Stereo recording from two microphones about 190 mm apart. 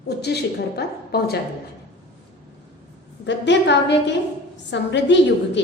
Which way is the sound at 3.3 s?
70° left (ahead or behind).